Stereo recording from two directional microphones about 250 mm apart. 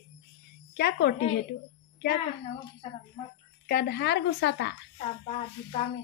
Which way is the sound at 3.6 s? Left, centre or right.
Left.